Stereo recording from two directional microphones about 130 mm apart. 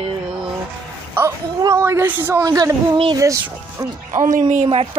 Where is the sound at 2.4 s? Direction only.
30° right (ahead or behind).